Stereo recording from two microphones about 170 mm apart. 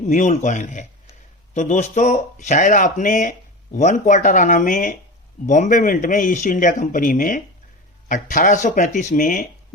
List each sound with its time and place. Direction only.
0.0 s speech: 45° left (ahead or behind)